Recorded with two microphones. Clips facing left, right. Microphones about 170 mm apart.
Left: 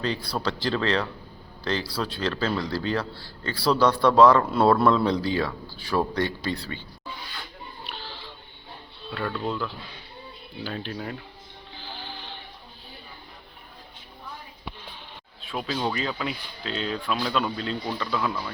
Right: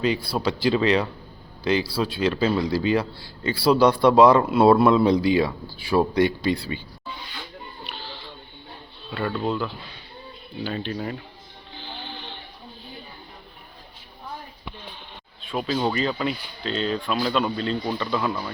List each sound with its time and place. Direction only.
0.0 s speech: 10° right (ahead or behind)
9.3 s speech: 20° right (ahead or behind)
10.6 s speech: centre (ahead or behind)
11.8 s music: 5° left (ahead or behind)
15.4 s speech: centre (ahead or behind)